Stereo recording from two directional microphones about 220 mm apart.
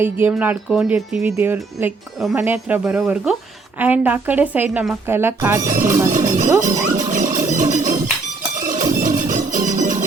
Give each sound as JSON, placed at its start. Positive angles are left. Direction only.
{"t": 0.0, "sound": "speech", "side_deg": -10}
{"t": 5.6, "sound": "speech", "side_deg": -35}
{"t": 6.1, "sound": "music", "side_deg": -35}